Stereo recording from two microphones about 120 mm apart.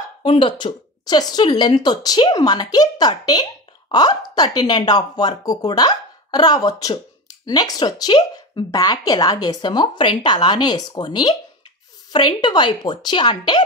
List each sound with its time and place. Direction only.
0.2 s speech: 45° left (ahead or behind)